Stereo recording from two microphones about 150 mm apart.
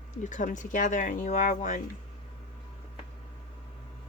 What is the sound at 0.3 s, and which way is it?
Speech, 55° left (ahead or behind).